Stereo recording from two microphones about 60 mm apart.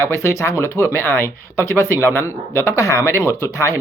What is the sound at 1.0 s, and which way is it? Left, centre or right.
Speech, left.